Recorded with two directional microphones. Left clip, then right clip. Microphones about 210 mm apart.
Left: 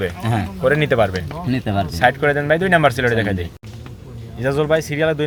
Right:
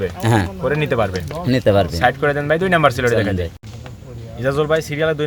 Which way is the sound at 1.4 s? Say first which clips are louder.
Right 8 dB; 50° right (ahead or behind).